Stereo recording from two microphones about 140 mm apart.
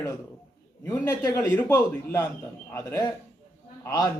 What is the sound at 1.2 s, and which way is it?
A man's voice, 15° left (ahead or behind).